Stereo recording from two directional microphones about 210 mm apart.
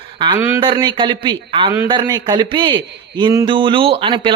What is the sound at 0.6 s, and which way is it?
A man's voice, 25° right (ahead or behind).